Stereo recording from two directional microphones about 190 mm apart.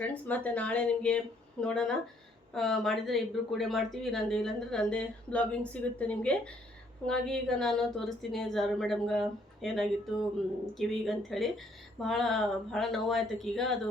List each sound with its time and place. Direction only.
0.0 s speech: 10° left (ahead or behind)